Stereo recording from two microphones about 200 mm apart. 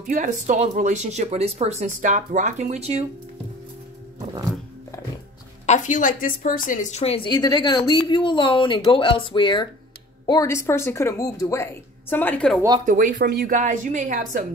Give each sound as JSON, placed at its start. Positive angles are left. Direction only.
{"t": 0.0, "sound": "speech", "side_deg": -40}
{"t": 5.7, "sound": "a woman's voice", "side_deg": 40}
{"t": 12.8, "sound": "speech", "side_deg": -40}